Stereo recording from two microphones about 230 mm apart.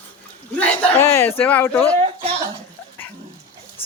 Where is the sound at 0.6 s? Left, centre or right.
Centre.